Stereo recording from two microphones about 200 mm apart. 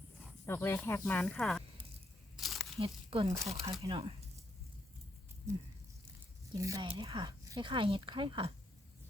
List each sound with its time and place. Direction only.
0.4 s speech: 10° left (ahead or behind)
2.3 s a sound: centre (ahead or behind)
2.7 s speech: 30° right (ahead or behind)
3.2 s speech: 15° right (ahead or behind)
3.7 s speech: 25° right (ahead or behind)
6.5 s speech: 15° right (ahead or behind)